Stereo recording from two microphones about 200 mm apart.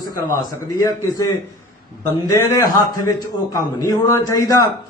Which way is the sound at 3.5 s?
15° left (ahead or behind).